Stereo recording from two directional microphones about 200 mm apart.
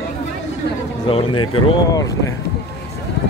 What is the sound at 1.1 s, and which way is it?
Speech, 25° left (ahead or behind).